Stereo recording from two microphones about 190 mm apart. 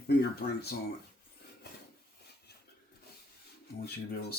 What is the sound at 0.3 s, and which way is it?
Speech, 55° left (ahead or behind).